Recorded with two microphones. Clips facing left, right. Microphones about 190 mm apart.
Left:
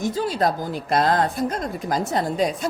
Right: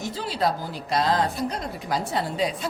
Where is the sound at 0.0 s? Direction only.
45° left (ahead or behind).